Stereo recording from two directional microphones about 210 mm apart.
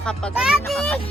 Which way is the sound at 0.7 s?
5° left (ahead or behind).